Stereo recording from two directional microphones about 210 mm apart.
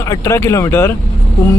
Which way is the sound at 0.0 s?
15° left (ahead or behind).